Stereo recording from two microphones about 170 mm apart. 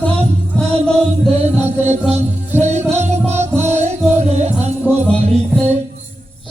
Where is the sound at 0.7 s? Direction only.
5° left (ahead or behind).